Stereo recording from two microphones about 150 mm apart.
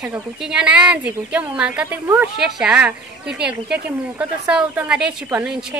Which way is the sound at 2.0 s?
20° right (ahead or behind).